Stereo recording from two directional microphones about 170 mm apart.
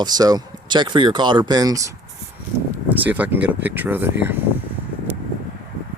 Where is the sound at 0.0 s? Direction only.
25° right (ahead or behind).